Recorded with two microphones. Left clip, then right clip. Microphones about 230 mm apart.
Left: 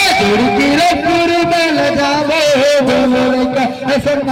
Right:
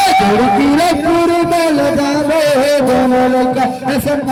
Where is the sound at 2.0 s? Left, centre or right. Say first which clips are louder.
Even; right.